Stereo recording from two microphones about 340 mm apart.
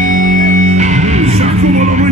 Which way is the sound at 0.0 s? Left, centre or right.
Right.